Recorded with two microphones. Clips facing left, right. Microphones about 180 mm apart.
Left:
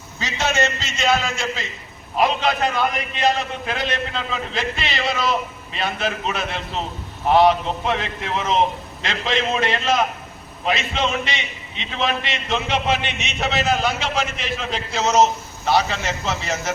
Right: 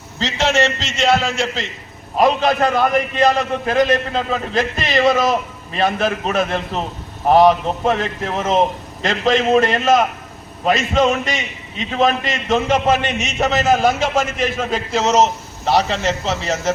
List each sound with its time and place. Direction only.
0.3 s a man's voice: 80° right
2.1 s a man's voice: 45° right (ahead or behind)